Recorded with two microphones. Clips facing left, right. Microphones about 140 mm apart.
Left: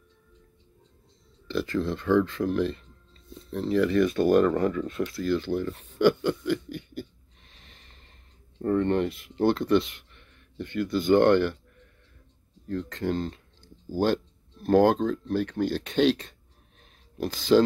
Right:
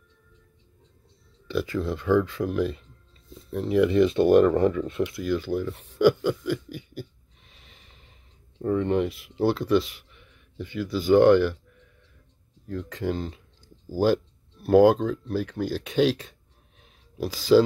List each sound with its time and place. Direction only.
1.5 s speech: 5° right (ahead or behind); by 4.8 s 25° right (ahead or behind)
5.0 s speech: 10° right (ahead or behind)
5.9 s a sound: 5° right (ahead or behind)
8.5 s speech: 5° right (ahead or behind)
12.6 s speech: 5° right (ahead or behind)